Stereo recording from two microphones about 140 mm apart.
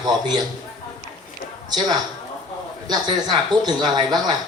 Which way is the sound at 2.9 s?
30° right (ahead or behind).